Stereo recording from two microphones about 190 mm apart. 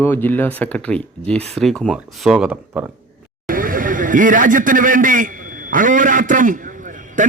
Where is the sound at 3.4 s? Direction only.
45° right (ahead or behind).